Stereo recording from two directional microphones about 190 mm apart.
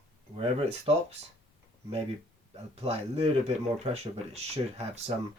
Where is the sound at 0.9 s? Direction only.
30° right (ahead or behind).